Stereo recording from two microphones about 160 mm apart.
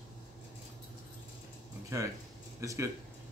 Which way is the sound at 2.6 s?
20° right (ahead or behind).